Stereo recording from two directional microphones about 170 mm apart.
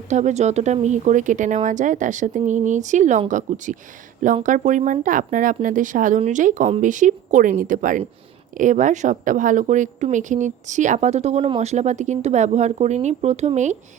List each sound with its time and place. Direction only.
0.1 s a woman's voice: 45° right (ahead or behind)